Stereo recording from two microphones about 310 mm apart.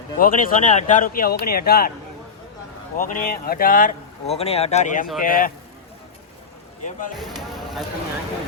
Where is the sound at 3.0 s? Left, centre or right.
Left.